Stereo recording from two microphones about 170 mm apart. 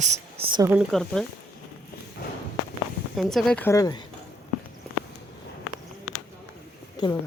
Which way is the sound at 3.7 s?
20° left (ahead or behind).